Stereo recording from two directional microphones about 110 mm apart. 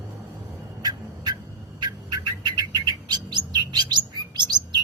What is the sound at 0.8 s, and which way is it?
Turkey, 40° right (ahead or behind).